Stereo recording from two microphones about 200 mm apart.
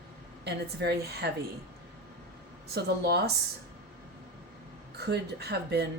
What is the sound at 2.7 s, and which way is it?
Speech, 55° right (ahead or behind).